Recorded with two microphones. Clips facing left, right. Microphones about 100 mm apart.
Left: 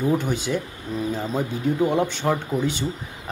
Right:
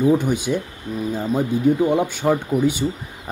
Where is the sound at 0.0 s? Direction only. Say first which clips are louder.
Right 5 dB; 15° right (ahead or behind).